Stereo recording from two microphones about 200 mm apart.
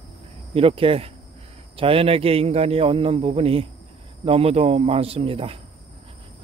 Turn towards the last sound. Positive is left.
turn(degrees=-30)  # may be behind; listen again after turning